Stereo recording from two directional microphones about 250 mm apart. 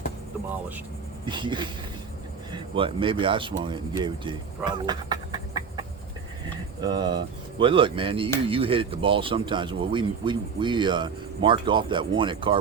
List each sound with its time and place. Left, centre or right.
1.2 s speech: centre
6.8 s speech: centre